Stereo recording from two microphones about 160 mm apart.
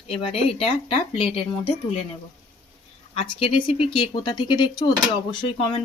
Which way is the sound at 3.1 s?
35° left (ahead or behind).